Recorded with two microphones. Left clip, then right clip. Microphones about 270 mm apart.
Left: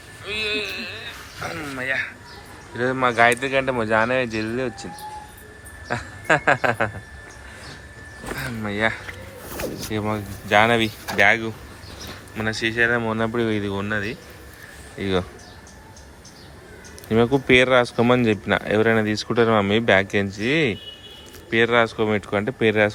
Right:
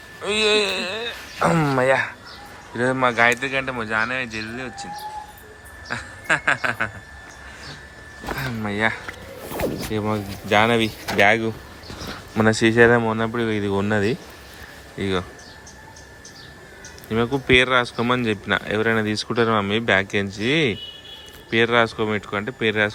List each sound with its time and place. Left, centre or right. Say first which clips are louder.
0.3 s a sound: right 6 dB; right
2.7 s speech: even; centre
5.9 s speech: left 2 dB; centre
8.3 s speech: right 2 dB; centre
14.9 s speech: left 1 dB; centre
17.1 s speech: left 2 dB; centre